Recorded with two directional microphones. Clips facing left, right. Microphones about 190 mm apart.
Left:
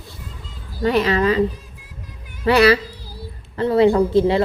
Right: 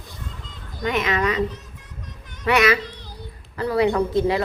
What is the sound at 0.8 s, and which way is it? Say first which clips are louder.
Speech: left 5 dB; 35° left (ahead or behind).